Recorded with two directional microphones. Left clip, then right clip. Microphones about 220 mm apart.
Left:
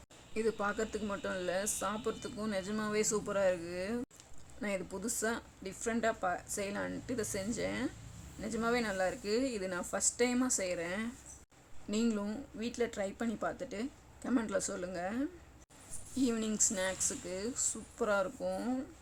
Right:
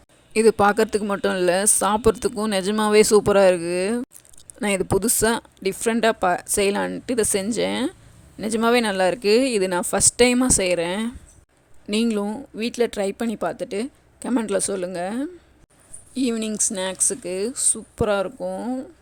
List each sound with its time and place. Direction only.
0.3 s speech: 45° right (ahead or behind); by 18.9 s 25° right (ahead or behind)